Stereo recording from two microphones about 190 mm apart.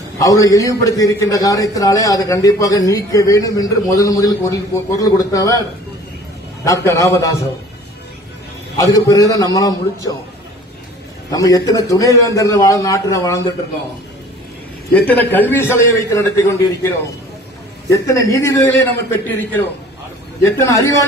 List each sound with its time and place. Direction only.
0.2 s a man's voice: 20° left (ahead or behind)
8.9 s a man's voice: 20° left (ahead or behind)
11.2 s a man's voice: 20° left (ahead or behind)
15.0 s a man's voice: 10° left (ahead or behind)